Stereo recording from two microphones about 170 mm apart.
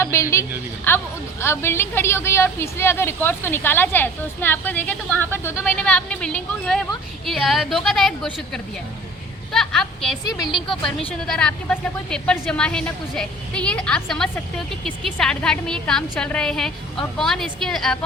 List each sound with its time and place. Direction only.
0.0 s a woman's voice: 15° left (ahead or behind)